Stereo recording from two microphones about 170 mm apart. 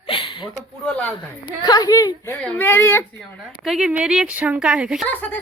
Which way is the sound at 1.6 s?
25° left (ahead or behind).